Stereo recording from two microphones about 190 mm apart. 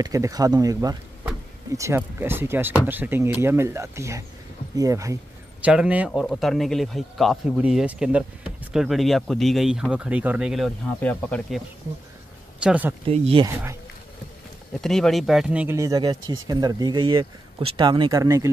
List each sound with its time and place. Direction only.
0.0 s speech: 20° right (ahead or behind)
5.6 s a man's voice: 5° right (ahead or behind)
12.5 s speech: 5° right (ahead or behind)
13.0 s speech: 30° right (ahead or behind)
14.7 s a man's voice: centre (ahead or behind); by 18.5 s 15° right (ahead or behind)